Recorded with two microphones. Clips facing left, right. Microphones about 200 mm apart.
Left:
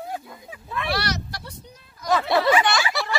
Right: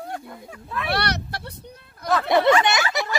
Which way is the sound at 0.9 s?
60° right (ahead or behind).